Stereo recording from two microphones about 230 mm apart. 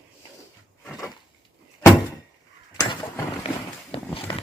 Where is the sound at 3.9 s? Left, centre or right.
Left.